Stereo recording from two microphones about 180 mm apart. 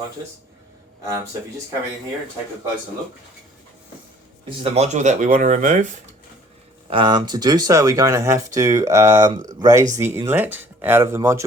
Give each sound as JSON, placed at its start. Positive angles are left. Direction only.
{"t": 1.0, "sound": "speech", "side_deg": -15}
{"t": 4.4, "sound": "speech", "side_deg": -35}
{"t": 6.9, "sound": "speech", "side_deg": -25}